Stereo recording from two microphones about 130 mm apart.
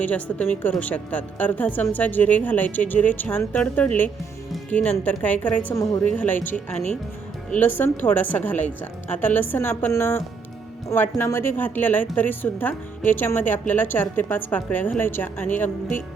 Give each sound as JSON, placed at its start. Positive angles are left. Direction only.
{"t": 0.0, "sound": "a woman's voice", "side_deg": 10}
{"t": 5.6, "sound": "a woman's voice", "side_deg": 25}
{"t": 6.0, "sound": "a woman's voice", "side_deg": 10}